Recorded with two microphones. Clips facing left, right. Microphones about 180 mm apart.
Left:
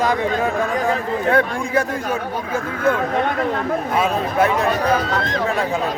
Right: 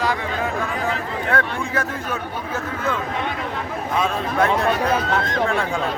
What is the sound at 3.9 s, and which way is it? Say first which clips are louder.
Speech: left 1 dB; 5° left (ahead or behind).